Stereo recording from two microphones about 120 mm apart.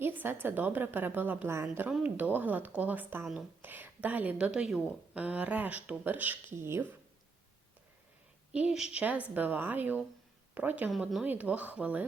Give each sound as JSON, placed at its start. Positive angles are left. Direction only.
{"t": 0.0, "sound": "a woman's voice", "side_deg": -15}
{"t": 8.5, "sound": "a woman's voice", "side_deg": -10}